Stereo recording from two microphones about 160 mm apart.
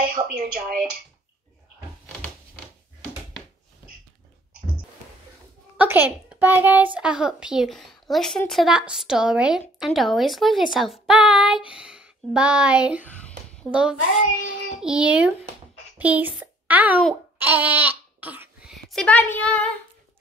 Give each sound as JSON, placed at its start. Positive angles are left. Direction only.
{"t": 0.1, "sound": "speech", "side_deg": -60}
{"t": 5.8, "sound": "a child's voice", "side_deg": -10}
{"t": 17.4, "sound": "babbling", "side_deg": -10}
{"t": 18.7, "sound": "speech", "side_deg": 0}